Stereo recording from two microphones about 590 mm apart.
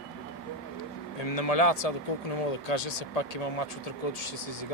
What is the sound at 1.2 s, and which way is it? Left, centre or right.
Speech, left.